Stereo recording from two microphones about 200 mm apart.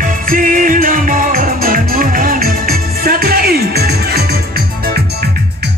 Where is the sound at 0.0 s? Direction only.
40° right (ahead or behind).